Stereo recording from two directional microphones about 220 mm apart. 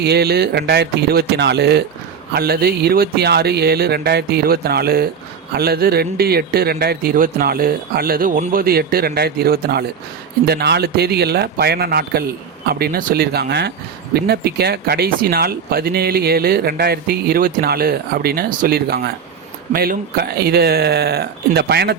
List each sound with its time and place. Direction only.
0.0 s speech: 45° right (ahead or behind)